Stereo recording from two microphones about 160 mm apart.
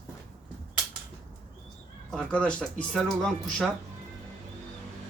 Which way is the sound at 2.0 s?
5° left (ahead or behind).